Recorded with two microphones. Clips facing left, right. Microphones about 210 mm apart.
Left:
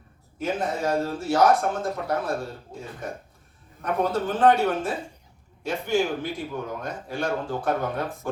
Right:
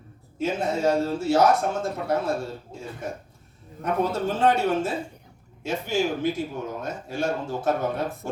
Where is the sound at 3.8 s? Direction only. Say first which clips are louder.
Even; 25° right (ahead or behind).